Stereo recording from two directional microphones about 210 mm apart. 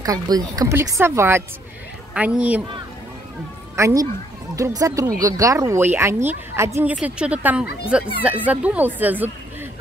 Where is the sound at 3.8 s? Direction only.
15° right (ahead or behind).